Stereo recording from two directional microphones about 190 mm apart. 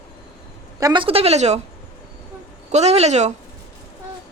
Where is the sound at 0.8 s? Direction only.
25° right (ahead or behind).